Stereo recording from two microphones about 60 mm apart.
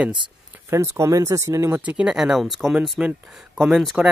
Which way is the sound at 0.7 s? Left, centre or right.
Right.